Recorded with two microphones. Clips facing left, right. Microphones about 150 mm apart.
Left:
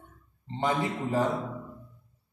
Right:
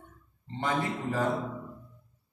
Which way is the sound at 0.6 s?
15° left (ahead or behind).